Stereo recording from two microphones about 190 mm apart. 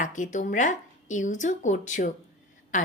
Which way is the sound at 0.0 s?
40° left (ahead or behind).